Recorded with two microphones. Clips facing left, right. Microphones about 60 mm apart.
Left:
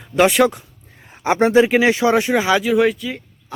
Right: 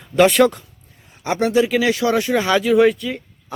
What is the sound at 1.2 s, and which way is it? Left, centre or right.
Speech, left.